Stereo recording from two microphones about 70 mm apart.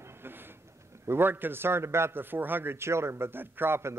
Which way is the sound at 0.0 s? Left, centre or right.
Right.